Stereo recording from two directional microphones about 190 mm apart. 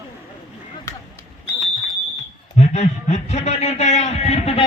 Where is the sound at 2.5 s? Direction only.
35° left (ahead or behind).